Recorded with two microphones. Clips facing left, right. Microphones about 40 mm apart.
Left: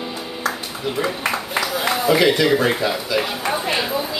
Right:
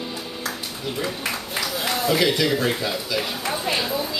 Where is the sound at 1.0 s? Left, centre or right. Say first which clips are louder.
Left 6 dB; left.